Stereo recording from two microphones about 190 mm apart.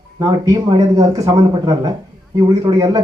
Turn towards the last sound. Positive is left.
turn(degrees=-20)  # may be behind; listen again after turning